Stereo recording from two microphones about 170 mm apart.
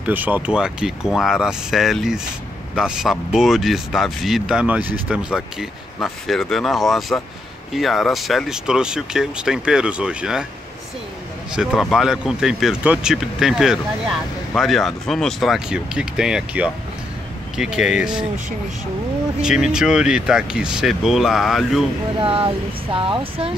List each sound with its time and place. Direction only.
0.0 s speech: 10° right (ahead or behind)
11.5 s speech: centre (ahead or behind)
19.4 s speech: 5° right (ahead or behind)
22.2 s speech: 35° right (ahead or behind)